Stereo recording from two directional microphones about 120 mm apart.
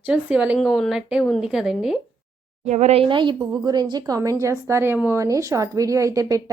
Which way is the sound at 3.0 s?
45° right (ahead or behind).